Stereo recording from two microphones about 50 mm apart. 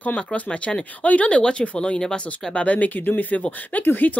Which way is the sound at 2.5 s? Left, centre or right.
Left.